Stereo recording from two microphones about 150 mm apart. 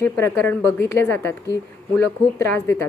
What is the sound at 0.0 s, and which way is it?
A woman's voice, 15° left (ahead or behind).